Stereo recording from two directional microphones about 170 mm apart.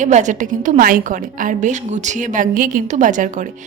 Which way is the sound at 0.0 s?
45° right (ahead or behind).